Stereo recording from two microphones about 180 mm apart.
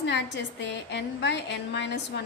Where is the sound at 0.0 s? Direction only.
80° left.